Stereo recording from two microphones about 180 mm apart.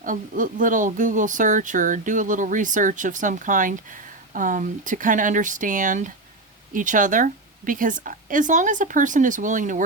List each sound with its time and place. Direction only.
0.0 s speech: 50° right (ahead or behind)